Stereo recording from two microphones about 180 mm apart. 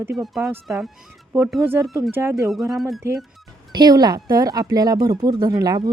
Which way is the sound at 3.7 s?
25° right (ahead or behind).